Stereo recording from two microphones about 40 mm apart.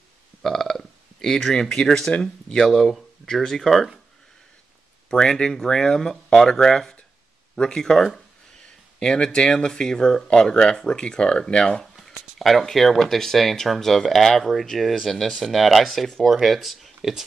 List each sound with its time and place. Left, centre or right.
0.4 s a sound: centre
2.1 s speech: centre
5.1 s speech: centre
8.6 s speech: left
11.8 s a sound: centre
12.7 s speech: centre